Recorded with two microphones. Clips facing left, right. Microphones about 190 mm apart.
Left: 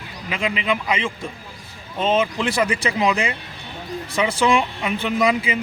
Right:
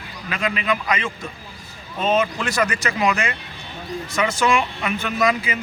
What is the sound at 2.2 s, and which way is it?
Speech, 15° left (ahead or behind).